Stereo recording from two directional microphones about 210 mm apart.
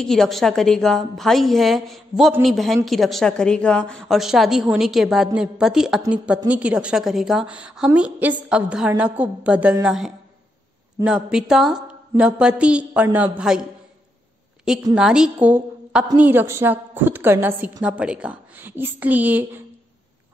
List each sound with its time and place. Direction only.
0.0 s a woman's voice: centre (ahead or behind)
15.0 s a woman's voice: 5° right (ahead or behind)